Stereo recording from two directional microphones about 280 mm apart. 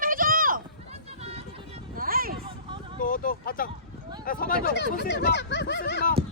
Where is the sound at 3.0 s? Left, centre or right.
Left.